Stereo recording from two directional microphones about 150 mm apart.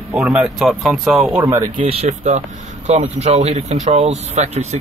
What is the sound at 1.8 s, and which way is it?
Speech, 40° right (ahead or behind).